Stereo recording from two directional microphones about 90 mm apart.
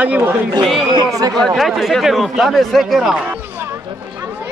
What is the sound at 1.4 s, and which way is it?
Speech, centre (ahead or behind).